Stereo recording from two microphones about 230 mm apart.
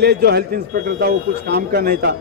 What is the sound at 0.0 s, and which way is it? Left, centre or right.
A man's voice, right.